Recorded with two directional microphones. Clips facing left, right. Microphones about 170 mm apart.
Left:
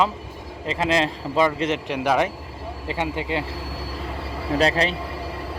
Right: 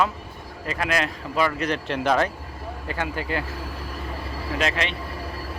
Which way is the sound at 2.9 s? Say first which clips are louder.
Left 2 dB; 20° left (ahead or behind).